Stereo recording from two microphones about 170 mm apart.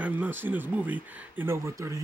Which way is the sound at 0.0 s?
10° right (ahead or behind).